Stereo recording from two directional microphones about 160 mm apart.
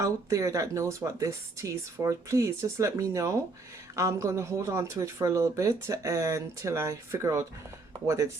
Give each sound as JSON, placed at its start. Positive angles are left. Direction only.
{"t": 0.0, "sound": "speech", "side_deg": -20}